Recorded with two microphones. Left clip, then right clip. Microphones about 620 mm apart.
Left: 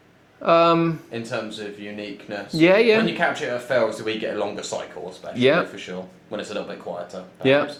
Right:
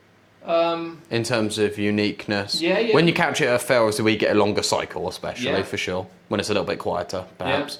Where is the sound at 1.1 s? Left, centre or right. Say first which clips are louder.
Right 6 dB; right.